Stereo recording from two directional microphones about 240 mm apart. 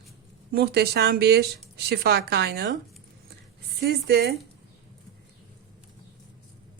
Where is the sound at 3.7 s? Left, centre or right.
Right.